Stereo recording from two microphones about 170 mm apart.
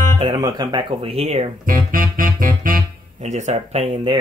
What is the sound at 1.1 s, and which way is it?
Speech, 35° right (ahead or behind).